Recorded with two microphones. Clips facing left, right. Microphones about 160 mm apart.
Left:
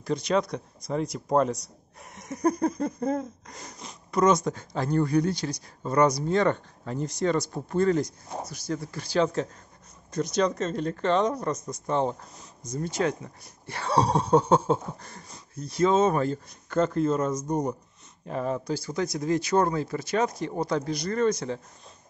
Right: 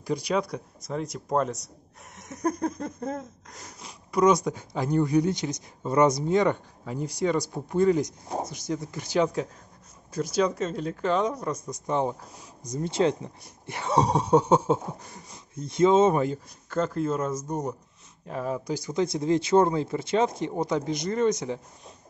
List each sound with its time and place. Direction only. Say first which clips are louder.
0.0 s speech: left 1 dB; 10° right (ahead or behind)
2.1 s a sound: left 3 dB; centre (ahead or behind)
8.5 s speech: right 1 dB; 20° right (ahead or behind); by 11.5 s 5° right (ahead or behind)
11.7 s a sound: even; 15° right (ahead or behind)
12.9 s speech: right 4 dB; 25° right (ahead or behind)
16.7 s speech: left 3 dB; centre (ahead or behind)
18.7 s speech: right 2 dB; 20° right (ahead or behind)